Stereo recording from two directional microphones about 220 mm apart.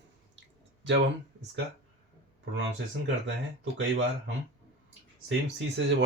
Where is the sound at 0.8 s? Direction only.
55° right (ahead or behind).